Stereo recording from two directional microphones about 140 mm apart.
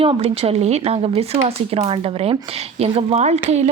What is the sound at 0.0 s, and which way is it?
Speech, 45° right (ahead or behind).